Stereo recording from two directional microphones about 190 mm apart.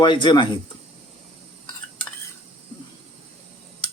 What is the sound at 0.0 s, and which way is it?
Speech, 25° left (ahead or behind).